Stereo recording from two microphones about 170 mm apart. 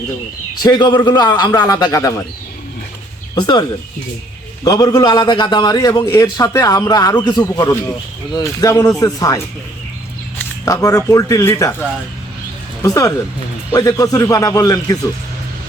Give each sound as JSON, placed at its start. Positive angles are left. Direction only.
{"t": 0.6, "sound": "a man's voice", "side_deg": 25}
{"t": 3.3, "sound": "a man's voice", "side_deg": 25}
{"t": 10.7, "sound": "a man's voice", "side_deg": 20}
{"t": 12.8, "sound": "a man's voice", "side_deg": 20}